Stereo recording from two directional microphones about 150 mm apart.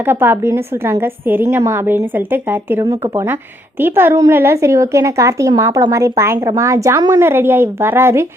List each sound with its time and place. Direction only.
0.0 s a woman's voice: 15° right (ahead or behind)